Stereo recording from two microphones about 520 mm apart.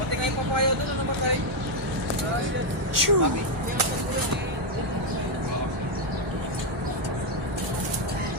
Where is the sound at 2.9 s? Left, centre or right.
Right.